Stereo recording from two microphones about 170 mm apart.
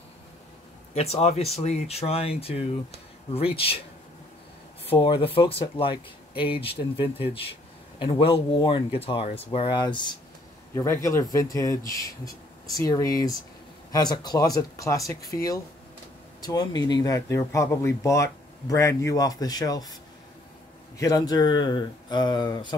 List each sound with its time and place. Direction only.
0.9 s speech: 35° left (ahead or behind)
4.8 s speech: 30° left (ahead or behind)
21.0 s speech: 20° left (ahead or behind)